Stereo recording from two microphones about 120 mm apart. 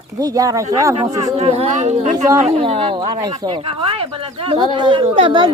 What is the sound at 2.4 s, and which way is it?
Speech, 55° right (ahead or behind).